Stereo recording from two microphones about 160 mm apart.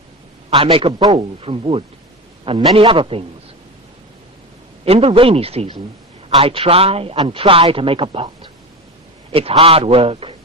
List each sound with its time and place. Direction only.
0.5 s a man's voice: 35° right (ahead or behind)
4.9 s speech: 35° right (ahead or behind)